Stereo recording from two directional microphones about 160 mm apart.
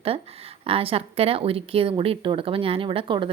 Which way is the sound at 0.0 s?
35° right (ahead or behind).